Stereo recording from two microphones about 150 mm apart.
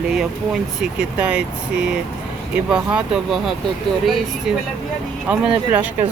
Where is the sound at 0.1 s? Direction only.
5° right (ahead or behind).